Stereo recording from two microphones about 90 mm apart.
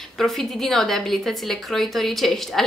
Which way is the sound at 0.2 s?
Centre (ahead or behind).